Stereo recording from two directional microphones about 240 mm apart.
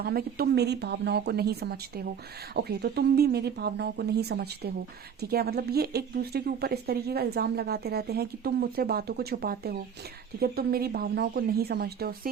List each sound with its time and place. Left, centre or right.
0.0 s speech: right